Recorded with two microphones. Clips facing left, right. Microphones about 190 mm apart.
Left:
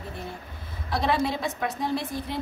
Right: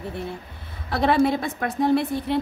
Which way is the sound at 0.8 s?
60° right (ahead or behind).